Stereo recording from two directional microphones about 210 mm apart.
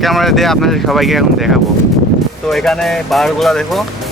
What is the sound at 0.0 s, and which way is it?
Speech, centre (ahead or behind).